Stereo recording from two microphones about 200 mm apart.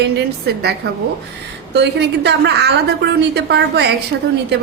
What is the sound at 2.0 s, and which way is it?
A woman's voice, 60° right (ahead or behind).